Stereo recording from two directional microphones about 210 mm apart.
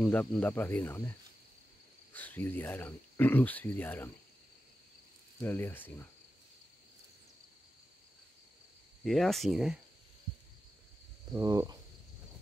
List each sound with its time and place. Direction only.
0.0 s speech: 5° left (ahead or behind)
2.1 s speech: 10° left (ahead or behind)
5.4 s speech: 10° left (ahead or behind)
9.0 s speech: centre (ahead or behind)
11.3 s speech: 15° right (ahead or behind)